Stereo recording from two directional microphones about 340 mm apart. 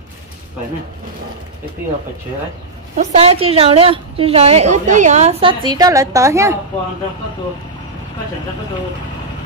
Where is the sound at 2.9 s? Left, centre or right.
Centre.